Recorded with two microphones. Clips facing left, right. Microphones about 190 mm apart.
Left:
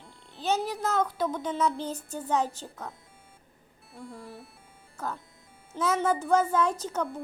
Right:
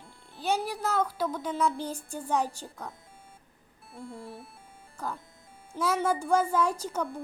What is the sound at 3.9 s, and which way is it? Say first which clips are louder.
Speech: right 1 dB; 30° right (ahead or behind).